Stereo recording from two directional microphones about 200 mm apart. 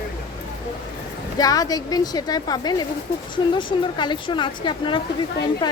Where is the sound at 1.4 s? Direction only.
20° left (ahead or behind).